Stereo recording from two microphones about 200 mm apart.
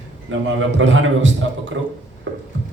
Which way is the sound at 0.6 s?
70° right (ahead or behind).